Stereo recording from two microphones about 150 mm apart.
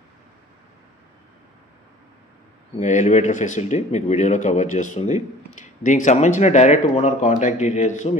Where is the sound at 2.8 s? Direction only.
55° left (ahead or behind).